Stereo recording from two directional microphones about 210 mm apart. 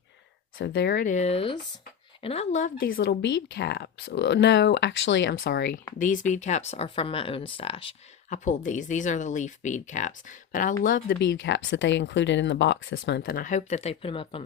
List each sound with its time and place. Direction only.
0.6 s speech: 55° left (ahead or behind)
6.0 s speech: 35° left (ahead or behind)
11.2 s speech: 60° left (ahead or behind); by 14.4 s 25° left (ahead or behind)